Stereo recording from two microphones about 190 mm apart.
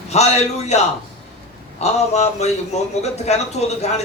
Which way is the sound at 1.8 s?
35° left (ahead or behind).